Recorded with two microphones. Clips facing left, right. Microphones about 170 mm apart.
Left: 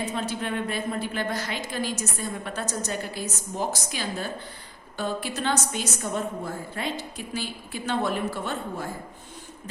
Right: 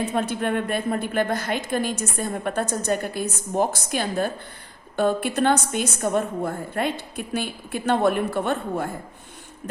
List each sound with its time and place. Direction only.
0.0 s a woman's voice: 55° right (ahead or behind)